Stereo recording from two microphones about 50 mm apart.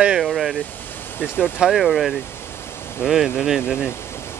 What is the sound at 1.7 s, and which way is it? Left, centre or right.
Speech, centre.